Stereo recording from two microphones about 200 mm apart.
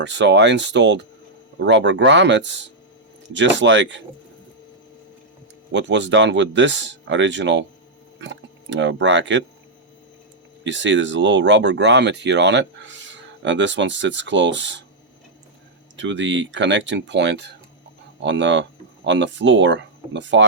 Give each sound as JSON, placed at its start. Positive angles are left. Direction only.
{"t": 0.0, "sound": "speech", "side_deg": -65}
{"t": 5.7, "sound": "speech", "side_deg": -60}
{"t": 10.6, "sound": "speech", "side_deg": -65}
{"t": 16.0, "sound": "speech", "side_deg": -65}